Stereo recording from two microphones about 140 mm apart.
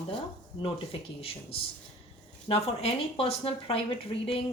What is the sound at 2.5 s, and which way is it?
Speech, 45° left (ahead or behind).